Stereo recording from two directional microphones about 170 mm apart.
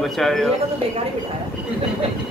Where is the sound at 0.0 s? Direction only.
Centre (ahead or behind).